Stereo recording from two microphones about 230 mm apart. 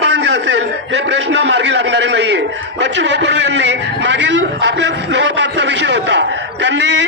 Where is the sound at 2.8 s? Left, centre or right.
Right.